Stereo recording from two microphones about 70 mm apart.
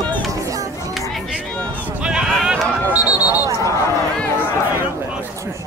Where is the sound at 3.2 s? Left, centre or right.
Left.